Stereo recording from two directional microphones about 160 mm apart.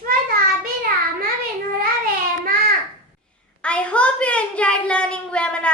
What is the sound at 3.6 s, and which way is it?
A woman's voice, 5° left (ahead or behind).